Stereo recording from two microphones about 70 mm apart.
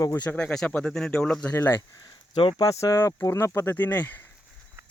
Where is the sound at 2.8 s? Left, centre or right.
Left.